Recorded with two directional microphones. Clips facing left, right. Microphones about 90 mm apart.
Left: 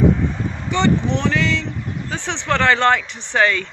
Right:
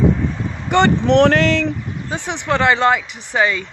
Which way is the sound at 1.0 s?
90° right.